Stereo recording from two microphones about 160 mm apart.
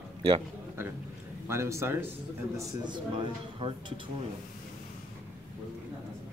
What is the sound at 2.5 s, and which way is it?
A man's voice, 30° right (ahead or behind).